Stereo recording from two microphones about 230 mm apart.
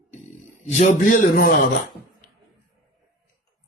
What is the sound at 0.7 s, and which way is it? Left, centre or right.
Speech, left.